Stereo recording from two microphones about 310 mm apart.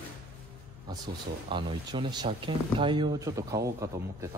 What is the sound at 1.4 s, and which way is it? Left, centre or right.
Speech, centre.